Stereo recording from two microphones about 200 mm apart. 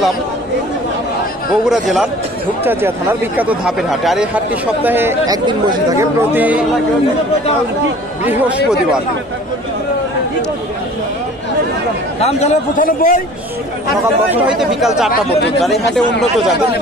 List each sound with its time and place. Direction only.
1.5 s speech: centre (ahead or behind)
8.3 s speech: 5° right (ahead or behind)
12.2 s a man's voice: 30° left (ahead or behind)
14.3 s speech: 5° right (ahead or behind)